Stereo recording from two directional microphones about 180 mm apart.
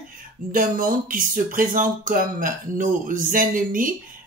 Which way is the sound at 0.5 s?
50° right (ahead or behind).